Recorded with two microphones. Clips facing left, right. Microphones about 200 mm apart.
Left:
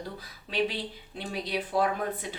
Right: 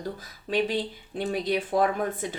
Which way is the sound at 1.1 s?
50° right (ahead or behind).